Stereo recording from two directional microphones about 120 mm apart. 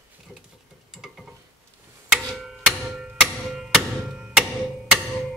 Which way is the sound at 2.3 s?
Centre (ahead or behind).